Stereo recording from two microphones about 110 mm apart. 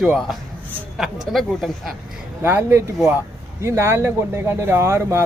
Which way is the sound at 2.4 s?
15° right (ahead or behind).